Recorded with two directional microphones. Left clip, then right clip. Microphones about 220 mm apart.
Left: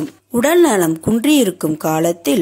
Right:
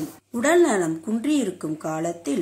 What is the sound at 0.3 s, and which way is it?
A woman's voice, 40° left (ahead or behind).